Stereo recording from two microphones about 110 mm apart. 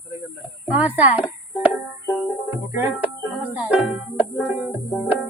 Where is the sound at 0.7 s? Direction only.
15° right (ahead or behind).